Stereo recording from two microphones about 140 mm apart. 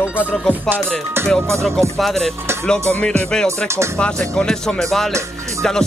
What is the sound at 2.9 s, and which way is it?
Music, 10° left (ahead or behind).